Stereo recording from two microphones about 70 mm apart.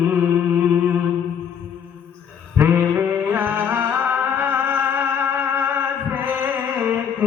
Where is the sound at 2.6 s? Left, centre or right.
Right.